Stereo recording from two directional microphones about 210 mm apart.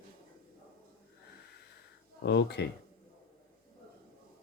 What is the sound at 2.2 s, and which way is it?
Speech, 55° left (ahead or behind).